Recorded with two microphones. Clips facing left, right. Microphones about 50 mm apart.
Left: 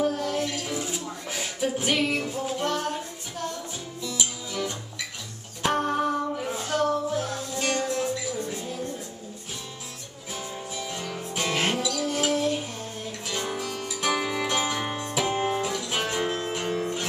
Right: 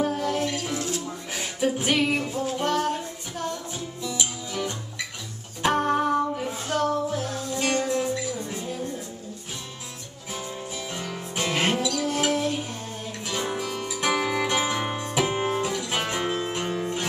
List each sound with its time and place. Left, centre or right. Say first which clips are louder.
0.0 s music: right 1 dB; centre
0.7 s music: right 2 dB; centre
1.3 s music: right 2 dB; centre
10.3 s music: right 1 dB; centre